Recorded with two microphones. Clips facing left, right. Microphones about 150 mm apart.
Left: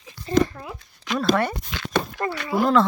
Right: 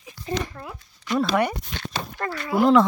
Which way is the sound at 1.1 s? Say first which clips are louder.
Right 3 dB; 90° left.